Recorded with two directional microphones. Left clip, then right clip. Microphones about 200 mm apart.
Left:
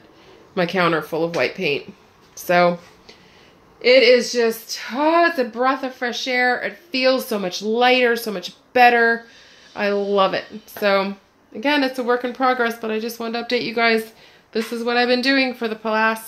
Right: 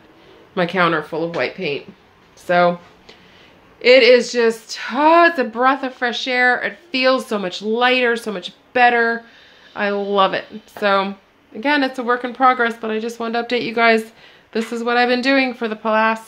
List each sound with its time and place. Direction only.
0.6 s speech: 10° left (ahead or behind)
3.8 s speech: centre (ahead or behind)